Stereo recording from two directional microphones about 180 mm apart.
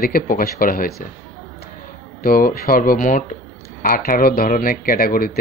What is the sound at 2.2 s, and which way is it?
Speech, 55° left (ahead or behind).